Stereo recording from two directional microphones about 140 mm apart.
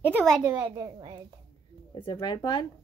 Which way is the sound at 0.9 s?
35° right (ahead or behind).